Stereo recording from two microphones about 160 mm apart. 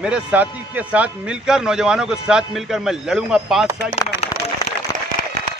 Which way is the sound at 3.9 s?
45° left (ahead or behind).